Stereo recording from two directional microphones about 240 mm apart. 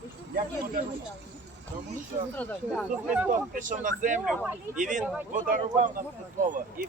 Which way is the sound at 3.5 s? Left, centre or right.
Right.